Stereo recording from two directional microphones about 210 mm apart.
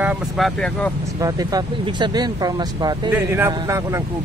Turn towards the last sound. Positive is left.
turn(degrees=-15)  # may be behind; listen again after turning